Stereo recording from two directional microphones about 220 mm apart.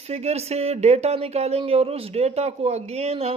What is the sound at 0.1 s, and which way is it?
Speech, 30° right (ahead or behind).